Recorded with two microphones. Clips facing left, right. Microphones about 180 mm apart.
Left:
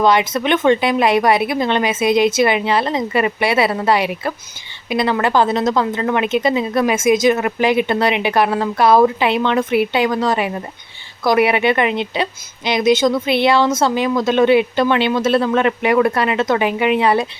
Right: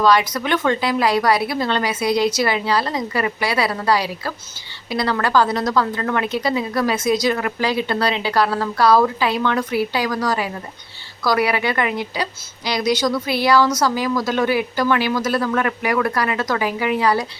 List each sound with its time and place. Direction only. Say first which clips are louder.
0.0 s a woman's voice: left 2 dB; 20° left (ahead or behind)